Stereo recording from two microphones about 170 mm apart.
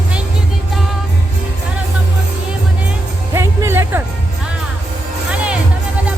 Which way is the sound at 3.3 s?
15° right (ahead or behind).